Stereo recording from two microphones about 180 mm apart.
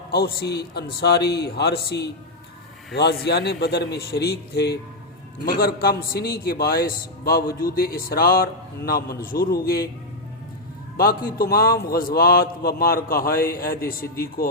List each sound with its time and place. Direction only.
0.1 s a man's voice: 60° left (ahead or behind)
10.9 s a man's voice: 55° left (ahead or behind)